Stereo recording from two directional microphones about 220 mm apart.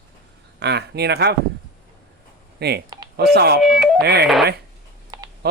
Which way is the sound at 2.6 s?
50° right (ahead or behind).